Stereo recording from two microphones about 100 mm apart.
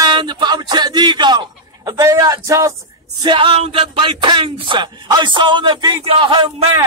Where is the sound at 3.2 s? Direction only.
55° right (ahead or behind).